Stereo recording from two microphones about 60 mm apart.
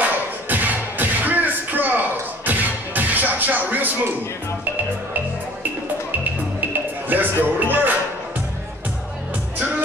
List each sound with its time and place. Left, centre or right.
0.0 s music: right
6.6 s music: right